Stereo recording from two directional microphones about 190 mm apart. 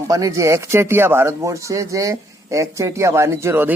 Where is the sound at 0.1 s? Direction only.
15° right (ahead or behind).